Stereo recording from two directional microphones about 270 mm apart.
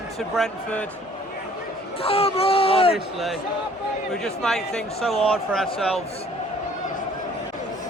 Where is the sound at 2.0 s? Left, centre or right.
Left.